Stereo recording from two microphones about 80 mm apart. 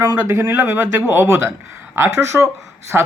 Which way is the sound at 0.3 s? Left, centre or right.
Right.